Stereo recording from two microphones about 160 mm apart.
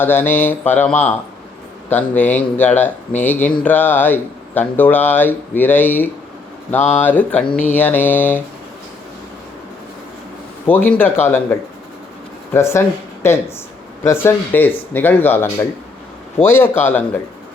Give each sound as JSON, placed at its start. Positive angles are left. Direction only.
{"t": 0.0, "sound": "speech", "side_deg": 15}
{"t": 10.7, "sound": "speech", "side_deg": 10}
{"t": 12.5, "sound": "speech", "side_deg": 15}